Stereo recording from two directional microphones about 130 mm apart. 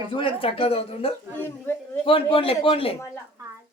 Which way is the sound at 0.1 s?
45° left (ahead or behind).